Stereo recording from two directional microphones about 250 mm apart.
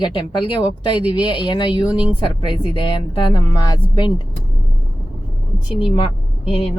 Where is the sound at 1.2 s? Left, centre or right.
Centre.